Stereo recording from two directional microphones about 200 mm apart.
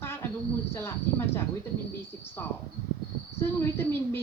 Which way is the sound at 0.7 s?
10° left (ahead or behind).